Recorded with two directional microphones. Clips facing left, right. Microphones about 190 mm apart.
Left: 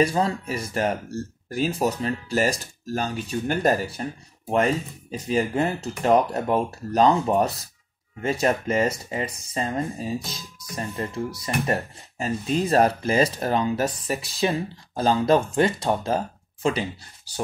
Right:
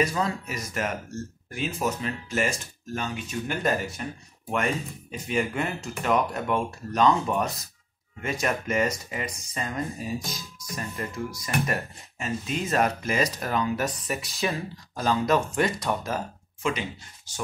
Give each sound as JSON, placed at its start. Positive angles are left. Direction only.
{"t": 0.0, "sound": "speech", "side_deg": 30}